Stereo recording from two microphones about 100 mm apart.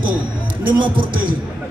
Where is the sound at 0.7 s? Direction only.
55° right (ahead or behind).